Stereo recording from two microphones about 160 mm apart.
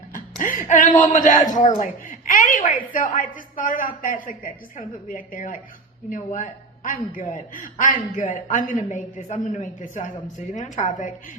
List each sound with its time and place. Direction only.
0.1 s a woman's voice: 55° left (ahead or behind)